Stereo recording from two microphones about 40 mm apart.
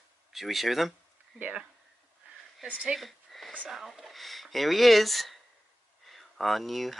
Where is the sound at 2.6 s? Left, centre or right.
Right.